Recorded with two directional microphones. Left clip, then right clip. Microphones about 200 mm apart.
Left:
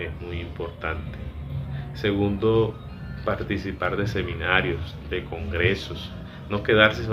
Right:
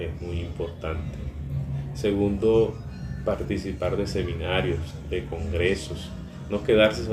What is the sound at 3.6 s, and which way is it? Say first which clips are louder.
Speech: left 1 dB; 15° right (ahead or behind).